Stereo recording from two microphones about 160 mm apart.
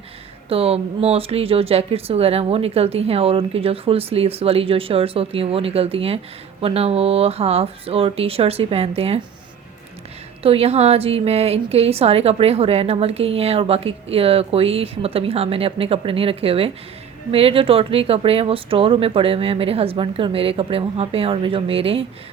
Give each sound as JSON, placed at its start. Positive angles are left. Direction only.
{"t": 0.4, "sound": "a woman's voice", "side_deg": -35}
{"t": 10.4, "sound": "a woman's voice", "side_deg": -40}